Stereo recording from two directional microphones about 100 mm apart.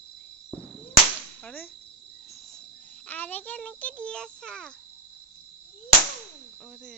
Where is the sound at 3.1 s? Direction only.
15° left (ahead or behind).